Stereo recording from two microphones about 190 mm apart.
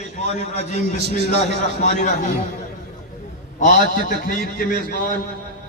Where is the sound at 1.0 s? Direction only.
60° right (ahead or behind).